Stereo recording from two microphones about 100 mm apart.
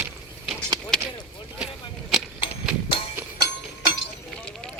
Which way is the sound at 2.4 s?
60° left (ahead or behind).